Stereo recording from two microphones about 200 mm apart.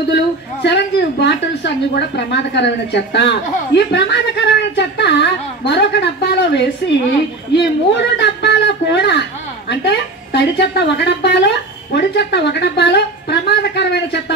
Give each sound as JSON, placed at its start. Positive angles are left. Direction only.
{"t": 0.1, "sound": "a woman's voice", "side_deg": 60}